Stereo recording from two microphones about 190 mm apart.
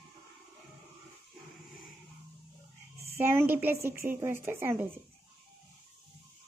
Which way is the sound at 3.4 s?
10° right (ahead or behind).